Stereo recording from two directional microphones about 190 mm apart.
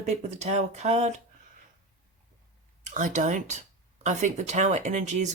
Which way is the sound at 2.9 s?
40° right (ahead or behind).